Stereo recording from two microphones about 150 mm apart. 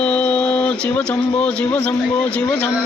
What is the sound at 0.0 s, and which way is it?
Speech, 5° left (ahead or behind).